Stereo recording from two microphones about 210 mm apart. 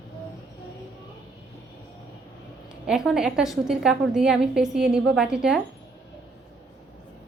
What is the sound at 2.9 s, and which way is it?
A woman's voice, 5° right (ahead or behind).